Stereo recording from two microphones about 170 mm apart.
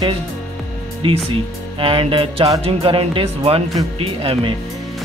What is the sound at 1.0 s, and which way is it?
Speech, 30° right (ahead or behind).